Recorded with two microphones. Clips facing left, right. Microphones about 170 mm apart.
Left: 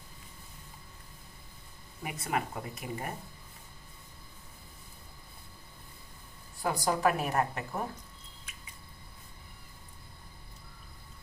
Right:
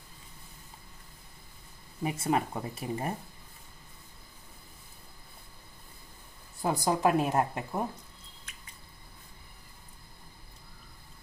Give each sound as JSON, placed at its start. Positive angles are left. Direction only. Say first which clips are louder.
{"t": 2.0, "sound": "a woman's voice", "louder": "right 5 dB", "side_deg": -30}
{"t": 6.6, "sound": "a woman's voice", "louder": "right 2 dB", "side_deg": -20}